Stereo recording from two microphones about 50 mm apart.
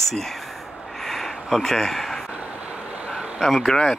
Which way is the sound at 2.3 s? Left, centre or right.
Right.